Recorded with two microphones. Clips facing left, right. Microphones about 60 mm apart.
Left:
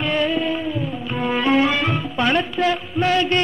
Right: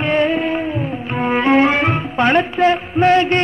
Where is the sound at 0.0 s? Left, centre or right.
Right.